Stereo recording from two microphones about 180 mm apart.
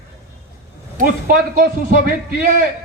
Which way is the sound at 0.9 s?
50° right (ahead or behind).